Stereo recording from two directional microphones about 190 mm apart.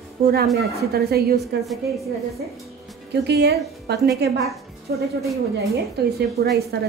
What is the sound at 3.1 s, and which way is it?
A woman's voice, 60° right (ahead or behind).